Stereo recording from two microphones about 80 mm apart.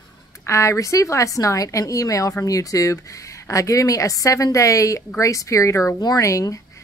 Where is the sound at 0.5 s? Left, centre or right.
Left.